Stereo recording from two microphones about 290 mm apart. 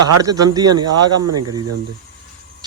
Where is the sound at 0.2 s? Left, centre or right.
Centre.